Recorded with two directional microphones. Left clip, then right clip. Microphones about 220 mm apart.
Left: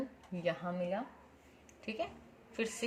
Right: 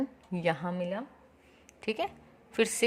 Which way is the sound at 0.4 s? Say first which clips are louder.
Right 5 dB; 55° right (ahead or behind).